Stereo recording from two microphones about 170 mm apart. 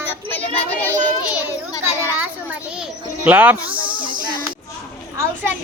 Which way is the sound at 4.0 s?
30° right (ahead or behind).